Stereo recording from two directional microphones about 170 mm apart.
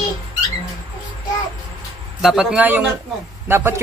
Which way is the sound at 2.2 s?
5° right (ahead or behind).